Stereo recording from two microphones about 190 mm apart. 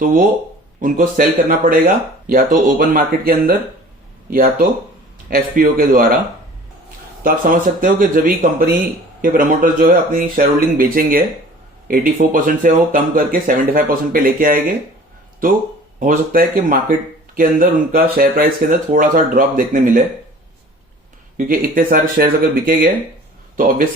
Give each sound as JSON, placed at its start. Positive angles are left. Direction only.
{"t": 0.8, "sound": "speech", "side_deg": -45}
{"t": 7.2, "sound": "speech", "side_deg": -45}
{"t": 16.0, "sound": "speech", "side_deg": -45}
{"t": 21.3, "sound": "speech", "side_deg": -45}